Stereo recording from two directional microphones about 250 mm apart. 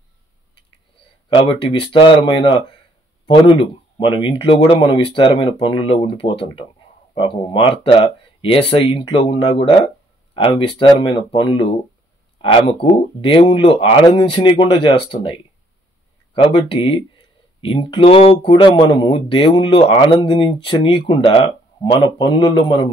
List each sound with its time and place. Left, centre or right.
1.3 s speech: left